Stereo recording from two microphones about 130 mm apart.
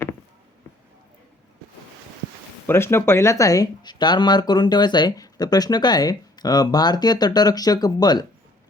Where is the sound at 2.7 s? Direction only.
20° left (ahead or behind).